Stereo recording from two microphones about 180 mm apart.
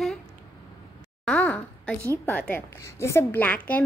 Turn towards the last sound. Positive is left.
turn(degrees=10)  # may be behind; listen again after turning